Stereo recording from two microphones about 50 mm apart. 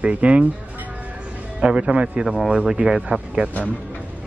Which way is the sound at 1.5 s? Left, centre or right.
Centre.